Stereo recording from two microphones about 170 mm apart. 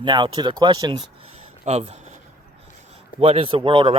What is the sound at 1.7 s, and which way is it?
Speech, 40° right (ahead or behind).